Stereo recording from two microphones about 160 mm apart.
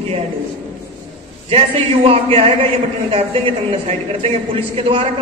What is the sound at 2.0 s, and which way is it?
Speech, 35° right (ahead or behind).